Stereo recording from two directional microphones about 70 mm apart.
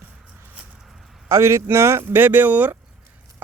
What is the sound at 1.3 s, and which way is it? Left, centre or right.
Speech, right.